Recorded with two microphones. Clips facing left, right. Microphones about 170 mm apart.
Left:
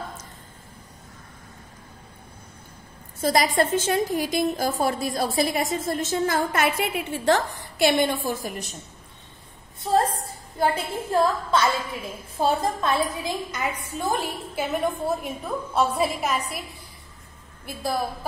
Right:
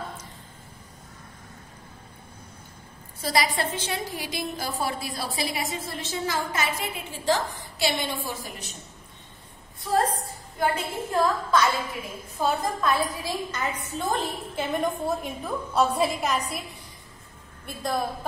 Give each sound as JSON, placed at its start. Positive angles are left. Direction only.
{"t": 3.2, "sound": "a woman's voice", "side_deg": 45}
{"t": 7.8, "sound": "a woman's voice", "side_deg": 50}
{"t": 10.6, "sound": "a woman's voice", "side_deg": 30}